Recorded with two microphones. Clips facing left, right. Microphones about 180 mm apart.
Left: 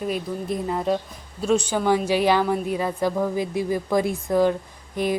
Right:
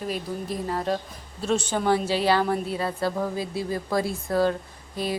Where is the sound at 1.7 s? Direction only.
10° left (ahead or behind).